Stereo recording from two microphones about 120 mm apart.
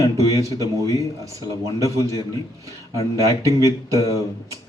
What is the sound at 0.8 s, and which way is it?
Speech, 30° right (ahead or behind).